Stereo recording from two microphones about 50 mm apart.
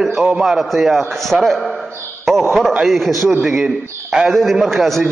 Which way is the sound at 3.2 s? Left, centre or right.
Centre.